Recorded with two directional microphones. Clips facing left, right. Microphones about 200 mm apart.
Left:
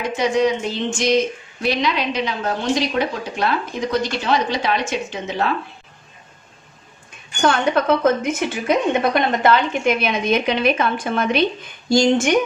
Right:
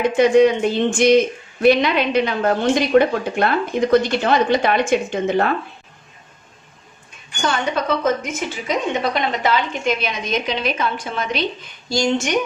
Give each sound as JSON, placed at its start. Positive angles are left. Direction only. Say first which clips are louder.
{"t": 0.0, "sound": "speech", "louder": "right 6 dB", "side_deg": -55}
{"t": 7.4, "sound": "a woman's voice", "louder": "left 4 dB", "side_deg": 55}